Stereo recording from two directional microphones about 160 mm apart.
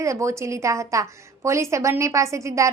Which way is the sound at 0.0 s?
20° right (ahead or behind).